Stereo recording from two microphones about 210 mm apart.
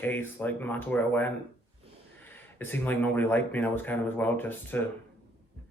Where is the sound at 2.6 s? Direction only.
10° left (ahead or behind).